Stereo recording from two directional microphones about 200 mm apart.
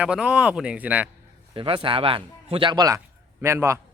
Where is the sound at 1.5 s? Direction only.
25° right (ahead or behind).